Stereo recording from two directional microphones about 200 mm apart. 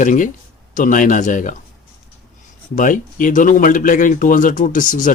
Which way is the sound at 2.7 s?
40° left (ahead or behind).